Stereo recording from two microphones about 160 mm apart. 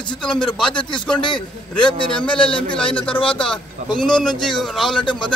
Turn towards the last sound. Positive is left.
turn(degrees=0)  # may be behind; listen again after turning